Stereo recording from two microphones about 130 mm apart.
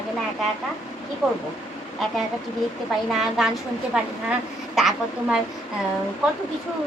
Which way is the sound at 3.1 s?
Centre (ahead or behind).